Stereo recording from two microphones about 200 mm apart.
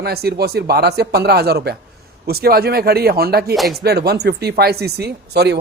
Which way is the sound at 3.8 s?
55° right (ahead or behind).